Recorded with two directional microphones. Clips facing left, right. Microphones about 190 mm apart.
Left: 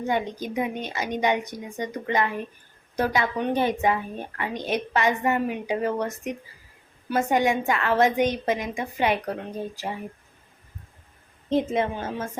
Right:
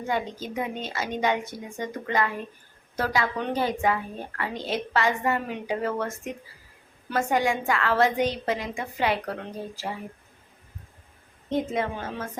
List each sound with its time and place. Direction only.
0.1 s a woman's voice: 20° left (ahead or behind)
11.5 s a woman's voice: 25° left (ahead or behind)